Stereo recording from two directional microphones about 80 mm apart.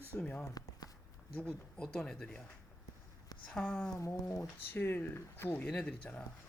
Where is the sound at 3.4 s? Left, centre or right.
Centre.